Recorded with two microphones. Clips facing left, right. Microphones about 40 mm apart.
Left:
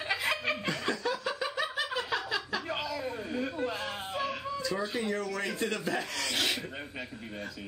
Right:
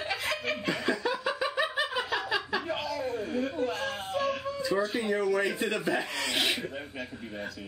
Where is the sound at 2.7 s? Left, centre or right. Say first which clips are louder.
Right 2 dB; centre.